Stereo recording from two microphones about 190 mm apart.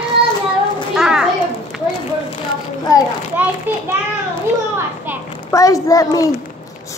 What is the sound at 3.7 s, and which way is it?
Child singing, 10° right (ahead or behind).